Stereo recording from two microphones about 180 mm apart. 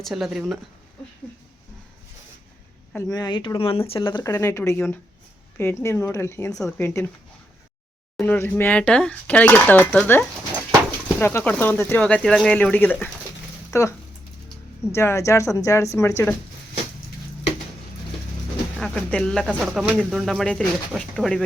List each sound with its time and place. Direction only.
0.0 s speech: centre (ahead or behind)
3.1 s speech: 25° left (ahead or behind)
8.1 s speech: 10° left (ahead or behind)
14.9 s speech: 15° left (ahead or behind)
18.8 s speech: 5° left (ahead or behind)